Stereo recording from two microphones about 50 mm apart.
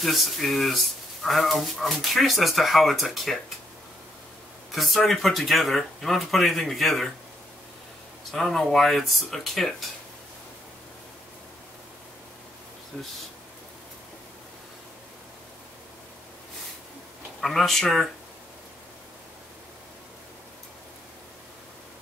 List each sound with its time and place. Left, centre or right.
0.0 s speech: centre
4.7 s speech: centre
8.3 s speech: centre
12.9 s speech: left
17.4 s speech: centre